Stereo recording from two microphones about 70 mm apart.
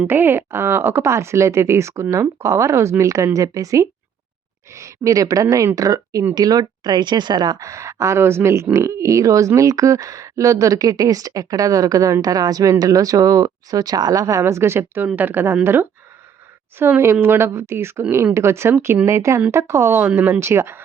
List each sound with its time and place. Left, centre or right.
0.1 s speech: right
6.3 s speech: right
7.6 s speech: right
8.7 s speech: right
15.0 s speech: right
17.0 s speech: right